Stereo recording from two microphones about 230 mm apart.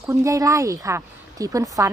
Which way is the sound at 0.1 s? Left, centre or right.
Centre.